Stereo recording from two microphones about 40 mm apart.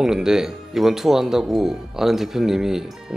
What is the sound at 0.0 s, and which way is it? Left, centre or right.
Speech, centre.